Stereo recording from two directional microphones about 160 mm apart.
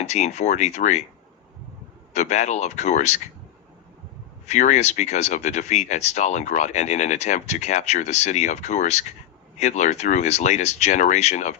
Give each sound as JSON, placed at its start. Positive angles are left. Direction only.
{"t": 0.0, "sound": "speech", "side_deg": 45}
{"t": 2.1, "sound": "speech", "side_deg": 45}
{"t": 4.4, "sound": "speech", "side_deg": 45}